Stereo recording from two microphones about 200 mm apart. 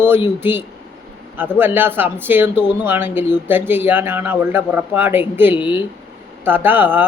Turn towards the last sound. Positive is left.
turn(degrees=-10)  # may be behind; listen again after turning